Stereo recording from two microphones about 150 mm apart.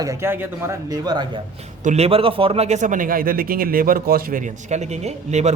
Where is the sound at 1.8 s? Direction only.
45° right (ahead or behind).